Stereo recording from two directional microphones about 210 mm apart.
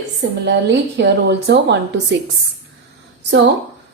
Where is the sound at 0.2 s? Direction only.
55° right (ahead or behind).